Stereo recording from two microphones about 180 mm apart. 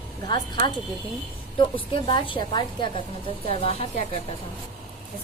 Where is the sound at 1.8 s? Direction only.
25° left (ahead or behind).